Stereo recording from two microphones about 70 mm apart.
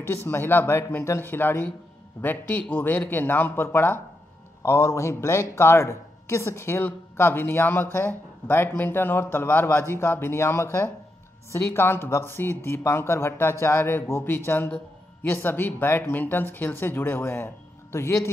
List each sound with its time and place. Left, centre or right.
0.0 s speech: left